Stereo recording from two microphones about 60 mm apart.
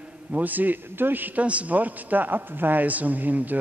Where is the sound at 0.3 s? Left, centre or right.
Right.